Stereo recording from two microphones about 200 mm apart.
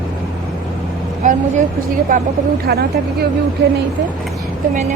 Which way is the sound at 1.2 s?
40° right (ahead or behind).